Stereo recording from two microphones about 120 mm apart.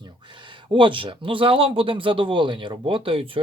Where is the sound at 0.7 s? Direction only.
45° right (ahead or behind).